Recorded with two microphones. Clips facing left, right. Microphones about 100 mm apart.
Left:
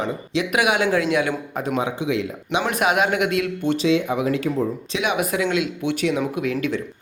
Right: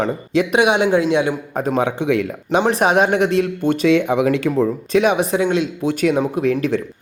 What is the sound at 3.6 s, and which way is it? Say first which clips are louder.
Speech: right 4 dB; 50° right (ahead or behind).